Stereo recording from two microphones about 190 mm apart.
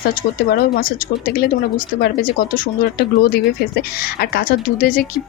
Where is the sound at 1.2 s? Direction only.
50° left (ahead or behind).